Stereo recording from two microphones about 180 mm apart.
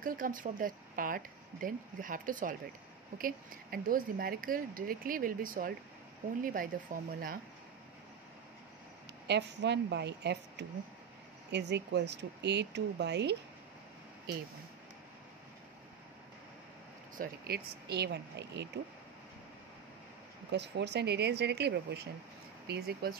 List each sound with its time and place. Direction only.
0.0 s speech: 50° right (ahead or behind)
9.3 s speech: 70° right (ahead or behind)
17.2 s speech: 65° right (ahead or behind)
20.5 s speech: 70° right (ahead or behind)